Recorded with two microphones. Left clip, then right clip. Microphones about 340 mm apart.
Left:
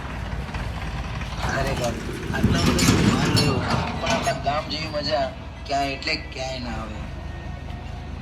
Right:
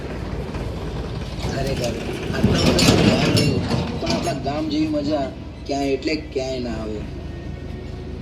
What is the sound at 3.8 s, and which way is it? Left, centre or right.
Music, centre.